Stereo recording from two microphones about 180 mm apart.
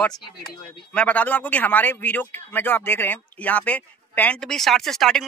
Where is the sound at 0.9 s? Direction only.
5° left (ahead or behind).